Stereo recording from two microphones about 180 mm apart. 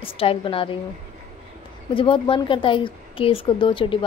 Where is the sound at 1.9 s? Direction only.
30° left (ahead or behind).